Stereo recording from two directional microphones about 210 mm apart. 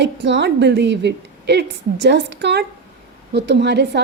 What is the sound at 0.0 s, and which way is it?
A woman's voice, 55° right (ahead or behind).